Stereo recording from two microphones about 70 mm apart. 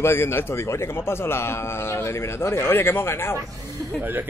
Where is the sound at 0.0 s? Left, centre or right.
Left.